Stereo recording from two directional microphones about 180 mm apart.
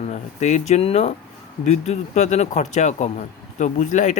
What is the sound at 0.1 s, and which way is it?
Speech, 40° left (ahead or behind).